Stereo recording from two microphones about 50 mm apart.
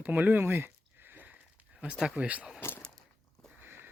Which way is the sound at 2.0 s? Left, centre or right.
Right.